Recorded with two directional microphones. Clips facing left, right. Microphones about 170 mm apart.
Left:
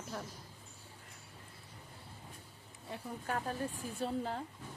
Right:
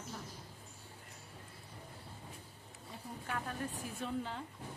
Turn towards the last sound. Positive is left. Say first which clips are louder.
# left 3 dB
turn(degrees=40)  # may be behind; listen again after turning